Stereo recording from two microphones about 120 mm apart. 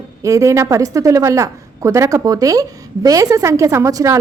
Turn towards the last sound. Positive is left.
turn(degrees=-25)  # may be behind; listen again after turning